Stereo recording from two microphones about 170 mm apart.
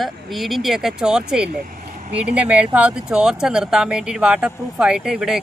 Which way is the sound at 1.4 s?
60° right (ahead or behind).